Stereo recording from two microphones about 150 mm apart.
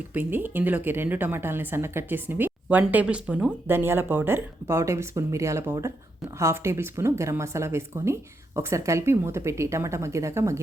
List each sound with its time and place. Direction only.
0.1 s speech: 10° right (ahead or behind)